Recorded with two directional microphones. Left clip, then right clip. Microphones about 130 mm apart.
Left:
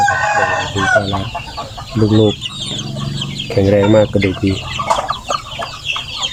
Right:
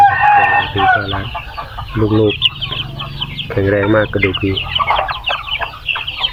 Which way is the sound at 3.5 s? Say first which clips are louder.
Left 2 dB; 30° left (ahead or behind).